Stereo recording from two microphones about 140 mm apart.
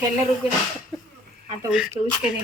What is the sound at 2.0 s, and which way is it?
Speech, 35° right (ahead or behind).